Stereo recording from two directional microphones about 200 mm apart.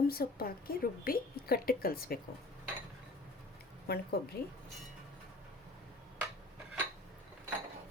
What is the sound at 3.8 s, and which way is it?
Speech, 55° left (ahead or behind).